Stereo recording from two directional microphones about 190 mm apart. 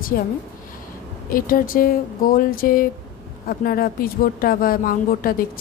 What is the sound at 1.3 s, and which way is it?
A woman's voice, 45° left (ahead or behind).